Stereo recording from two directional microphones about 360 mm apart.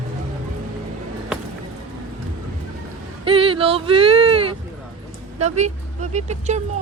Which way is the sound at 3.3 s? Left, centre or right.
Centre.